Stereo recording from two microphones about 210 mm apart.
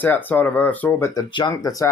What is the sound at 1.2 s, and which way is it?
Speech, 20° left (ahead or behind).